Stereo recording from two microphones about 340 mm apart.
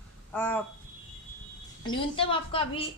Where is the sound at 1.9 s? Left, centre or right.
Centre.